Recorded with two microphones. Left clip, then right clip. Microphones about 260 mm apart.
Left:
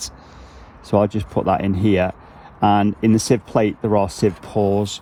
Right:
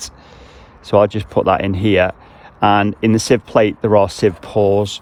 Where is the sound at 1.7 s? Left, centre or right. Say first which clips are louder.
Right 4 dB; right.